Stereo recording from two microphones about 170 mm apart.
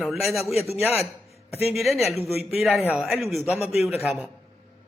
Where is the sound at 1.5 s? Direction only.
35° left (ahead or behind).